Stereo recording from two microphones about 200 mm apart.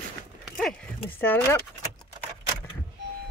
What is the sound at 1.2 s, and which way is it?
Speech, 10° left (ahead or behind).